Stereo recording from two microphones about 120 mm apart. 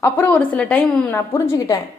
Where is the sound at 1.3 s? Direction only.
20° left (ahead or behind).